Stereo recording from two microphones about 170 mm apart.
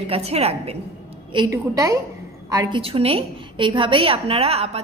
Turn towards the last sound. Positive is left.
turn(degrees=-35)  # may be behind; listen again after turning